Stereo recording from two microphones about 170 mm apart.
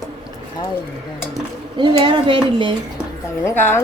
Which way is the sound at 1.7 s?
30° right (ahead or behind).